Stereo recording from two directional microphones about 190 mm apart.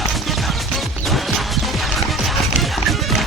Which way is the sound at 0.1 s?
Centre (ahead or behind).